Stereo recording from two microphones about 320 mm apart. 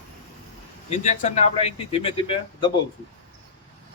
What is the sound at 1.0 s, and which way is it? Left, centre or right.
Speech, left.